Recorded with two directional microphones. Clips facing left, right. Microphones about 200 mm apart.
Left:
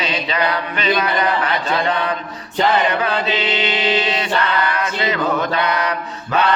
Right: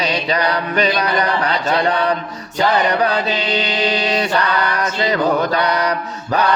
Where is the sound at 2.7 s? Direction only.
40° right (ahead or behind).